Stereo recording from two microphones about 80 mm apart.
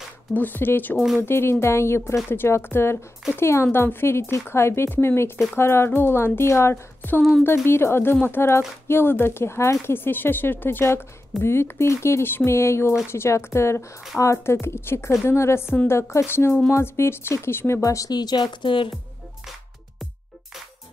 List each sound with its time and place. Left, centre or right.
0.3 s speech: left
0.9 s speech: centre
1.2 s speech: left
7.2 s speech: centre
7.4 s speech: left
18.1 s speech: left